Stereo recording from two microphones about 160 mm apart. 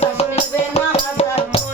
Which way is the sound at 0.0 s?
40° left (ahead or behind).